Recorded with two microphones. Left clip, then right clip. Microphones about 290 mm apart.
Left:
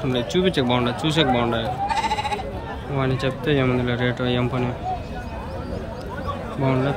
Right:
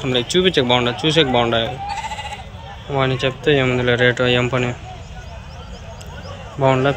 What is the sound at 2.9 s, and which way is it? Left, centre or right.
Speech, centre.